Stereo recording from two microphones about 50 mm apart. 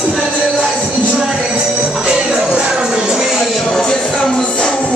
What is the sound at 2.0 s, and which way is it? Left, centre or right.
Music, centre.